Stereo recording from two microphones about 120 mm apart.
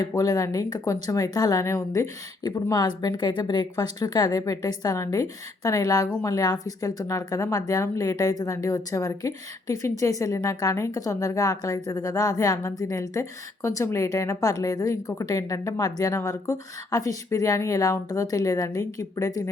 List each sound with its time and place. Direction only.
0.0 s a woman's voice: 30° left (ahead or behind)